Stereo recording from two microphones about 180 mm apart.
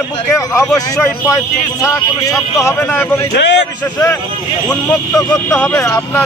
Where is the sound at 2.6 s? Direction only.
15° left (ahead or behind).